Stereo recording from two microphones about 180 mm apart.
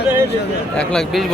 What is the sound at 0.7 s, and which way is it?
Speech, centre (ahead or behind).